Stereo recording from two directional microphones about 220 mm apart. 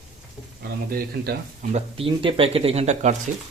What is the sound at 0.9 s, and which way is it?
Speech, 40° right (ahead or behind).